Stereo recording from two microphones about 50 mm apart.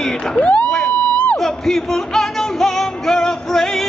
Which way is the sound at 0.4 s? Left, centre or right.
Left.